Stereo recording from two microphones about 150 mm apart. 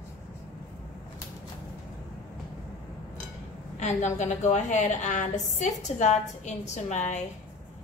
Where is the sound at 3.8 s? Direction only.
50° left (ahead or behind).